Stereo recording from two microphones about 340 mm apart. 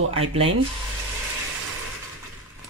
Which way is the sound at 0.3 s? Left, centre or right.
Centre.